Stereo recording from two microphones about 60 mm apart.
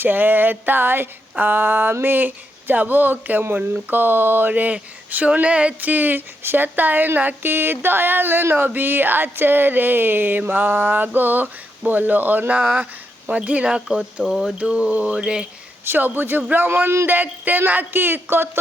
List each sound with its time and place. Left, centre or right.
0.0 s speech: right; by 15.4 s centre
15.8 s speech: right
17.1 s speech: right